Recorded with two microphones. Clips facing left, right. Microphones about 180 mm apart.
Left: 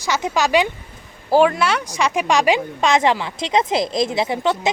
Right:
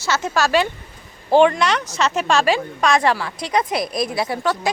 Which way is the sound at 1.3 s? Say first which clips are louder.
Right 1 dB; 5° left (ahead or behind).